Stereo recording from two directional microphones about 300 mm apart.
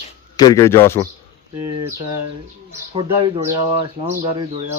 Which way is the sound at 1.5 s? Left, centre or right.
Right.